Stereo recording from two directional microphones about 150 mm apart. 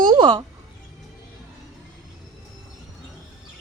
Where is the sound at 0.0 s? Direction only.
30° right (ahead or behind).